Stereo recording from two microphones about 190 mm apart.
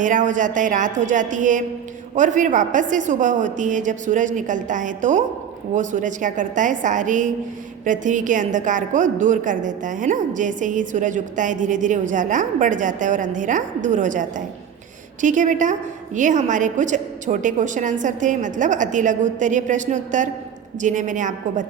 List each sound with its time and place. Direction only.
0.0 s a woman's voice: 40° right (ahead or behind)